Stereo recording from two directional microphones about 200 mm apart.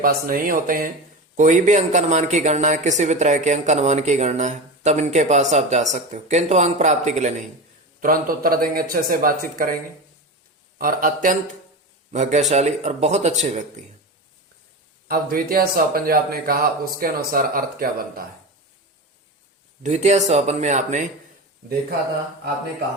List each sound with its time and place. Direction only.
0.0 s a woman's voice: 45° right (ahead or behind)
10.8 s a woman's voice: 45° right (ahead or behind)
15.0 s speech: 45° right (ahead or behind)
19.8 s a woman's voice: 35° right (ahead or behind)